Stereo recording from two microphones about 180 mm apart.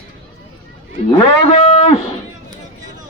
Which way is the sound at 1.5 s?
35° left (ahead or behind).